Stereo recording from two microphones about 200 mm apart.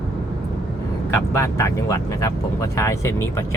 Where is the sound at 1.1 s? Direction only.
15° left (ahead or behind).